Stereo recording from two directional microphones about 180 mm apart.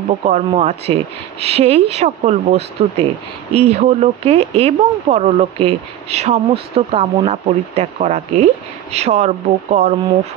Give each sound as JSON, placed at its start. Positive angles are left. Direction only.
{"t": 0.2, "sound": "speech", "side_deg": -35}